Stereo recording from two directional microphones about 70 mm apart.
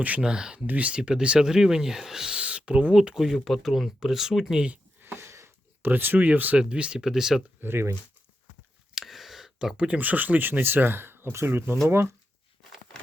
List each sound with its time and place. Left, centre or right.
0.2 s speech: centre
4.9 s a sound: right
5.9 s speech: right; by 7.4 s centre
7.6 s speech: right
9.0 s a sound: centre
9.7 s speech: centre; by 12.1 s right